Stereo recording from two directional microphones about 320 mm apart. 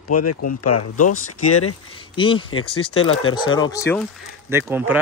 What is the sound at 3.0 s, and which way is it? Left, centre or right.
Speech, left.